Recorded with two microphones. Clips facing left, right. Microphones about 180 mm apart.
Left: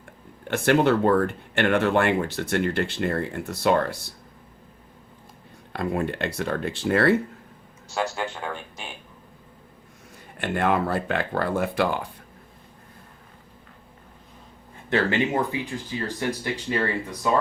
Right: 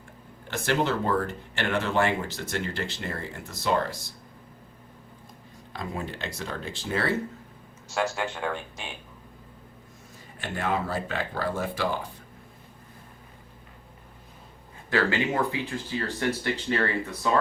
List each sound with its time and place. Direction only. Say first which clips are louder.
0.4 s speech: left 7 dB; 60° left (ahead or behind)
5.7 s speech: left 8 dB; 60° left (ahead or behind)
10.4 s speech: left 6 dB; 60° left (ahead or behind)
14.8 s speech: left 2 dB; 20° left (ahead or behind)